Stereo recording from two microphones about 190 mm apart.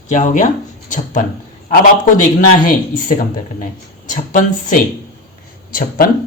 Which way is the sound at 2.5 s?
45° left (ahead or behind).